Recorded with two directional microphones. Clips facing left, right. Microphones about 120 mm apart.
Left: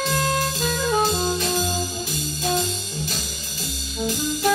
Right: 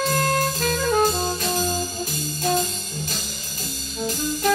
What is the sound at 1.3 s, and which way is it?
Music, 45° right (ahead or behind).